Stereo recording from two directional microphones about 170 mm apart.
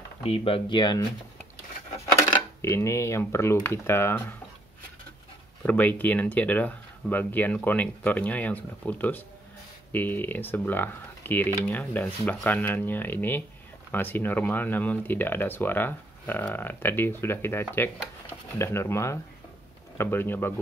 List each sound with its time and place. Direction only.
0.2 s speech: 35° left (ahead or behind)
2.6 s speech: 15° left (ahead or behind)
5.6 s speech: 10° left (ahead or behind)